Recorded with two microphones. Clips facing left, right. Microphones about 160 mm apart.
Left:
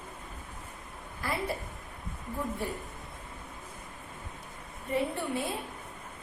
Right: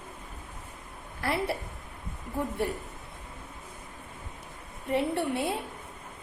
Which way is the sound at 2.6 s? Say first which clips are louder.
Right 9 dB; 70° right (ahead or behind).